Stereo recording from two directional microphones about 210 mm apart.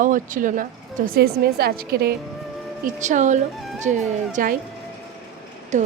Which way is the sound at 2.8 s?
35° right (ahead or behind).